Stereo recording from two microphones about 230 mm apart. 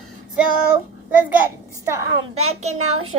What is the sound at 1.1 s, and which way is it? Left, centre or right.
Speech, centre.